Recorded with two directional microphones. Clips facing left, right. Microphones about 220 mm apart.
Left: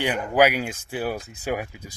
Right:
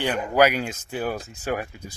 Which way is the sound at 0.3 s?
10° left (ahead or behind).